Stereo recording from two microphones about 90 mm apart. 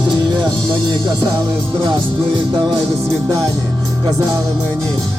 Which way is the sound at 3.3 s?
45° right (ahead or behind).